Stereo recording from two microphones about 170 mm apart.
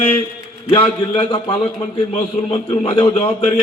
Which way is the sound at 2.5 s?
35° left (ahead or behind).